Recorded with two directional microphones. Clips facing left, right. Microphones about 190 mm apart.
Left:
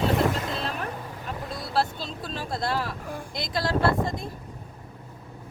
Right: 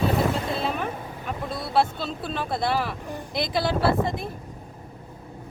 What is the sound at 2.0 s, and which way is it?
Speech, 5° right (ahead or behind).